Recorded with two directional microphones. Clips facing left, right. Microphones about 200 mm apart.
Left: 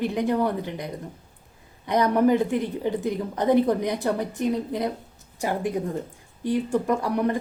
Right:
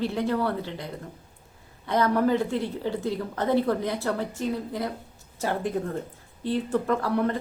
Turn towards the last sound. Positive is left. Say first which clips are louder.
# left 1 dB
turn(degrees=15)  # may be behind; listen again after turning